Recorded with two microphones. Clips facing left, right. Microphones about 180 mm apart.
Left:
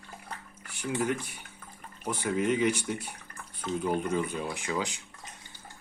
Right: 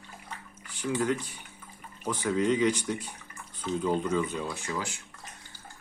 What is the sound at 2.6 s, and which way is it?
Speech, 10° left (ahead or behind).